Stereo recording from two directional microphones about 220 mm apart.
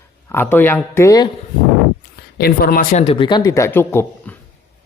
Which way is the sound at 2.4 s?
45° left (ahead or behind).